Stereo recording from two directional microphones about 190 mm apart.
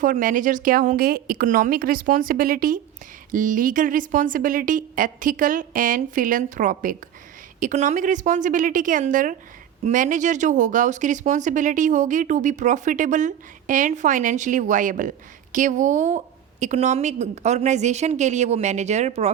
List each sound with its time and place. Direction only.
0.0 s a woman's voice: 45° right (ahead or behind)